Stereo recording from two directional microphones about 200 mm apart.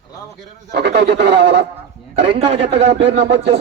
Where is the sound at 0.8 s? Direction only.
60° right (ahead or behind).